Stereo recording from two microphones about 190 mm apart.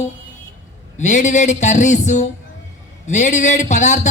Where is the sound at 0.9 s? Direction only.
40° left (ahead or behind).